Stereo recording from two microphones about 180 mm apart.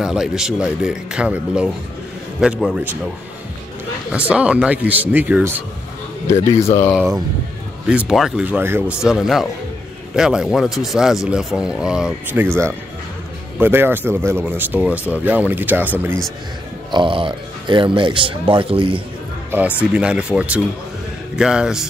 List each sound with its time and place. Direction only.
0.0 s speech: 5° right (ahead or behind)
4.1 s speech: 5° right (ahead or behind)
6.2 s a man's voice: 15° left (ahead or behind)
8.1 s speech: 5° right (ahead or behind)
13.6 s speech: 10° right (ahead or behind)
16.9 s speech: 30° right (ahead or behind)
19.5 s speech: 5° right (ahead or behind)